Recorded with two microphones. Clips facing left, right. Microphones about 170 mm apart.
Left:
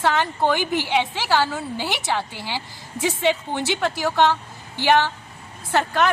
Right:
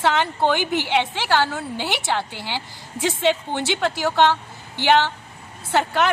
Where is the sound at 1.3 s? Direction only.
Centre (ahead or behind).